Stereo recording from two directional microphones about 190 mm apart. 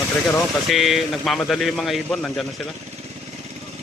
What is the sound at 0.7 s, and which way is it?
Speech, centre (ahead or behind).